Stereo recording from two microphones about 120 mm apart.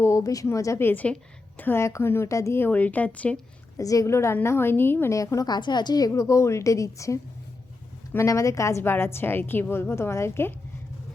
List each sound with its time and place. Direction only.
0.0 s a woman's voice: 25° left (ahead or behind); by 3.4 s 10° left (ahead or behind)
3.8 s a woman's voice: 30° left (ahead or behind)